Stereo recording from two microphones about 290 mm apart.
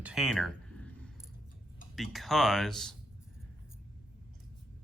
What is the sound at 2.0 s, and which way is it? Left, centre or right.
Speech, centre.